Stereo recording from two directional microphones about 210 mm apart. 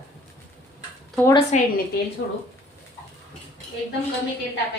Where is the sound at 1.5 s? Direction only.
35° left (ahead or behind).